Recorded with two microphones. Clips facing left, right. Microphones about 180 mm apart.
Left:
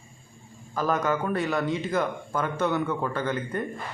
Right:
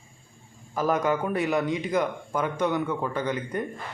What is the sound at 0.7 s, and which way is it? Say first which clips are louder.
Speech: right 1 dB; 20° right (ahead or behind).